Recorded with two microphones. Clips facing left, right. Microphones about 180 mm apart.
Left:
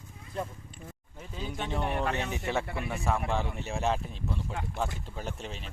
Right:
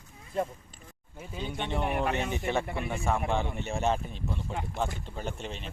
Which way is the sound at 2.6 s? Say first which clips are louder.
Right 2 dB; 25° right (ahead or behind).